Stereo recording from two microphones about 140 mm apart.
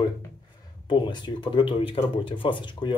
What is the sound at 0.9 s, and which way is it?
Speech, 35° left (ahead or behind).